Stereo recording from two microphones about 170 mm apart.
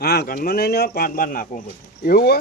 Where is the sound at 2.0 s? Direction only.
65° left (ahead or behind).